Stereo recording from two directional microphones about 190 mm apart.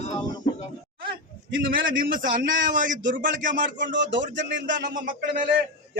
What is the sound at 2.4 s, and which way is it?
Speech, 75° right (ahead or behind).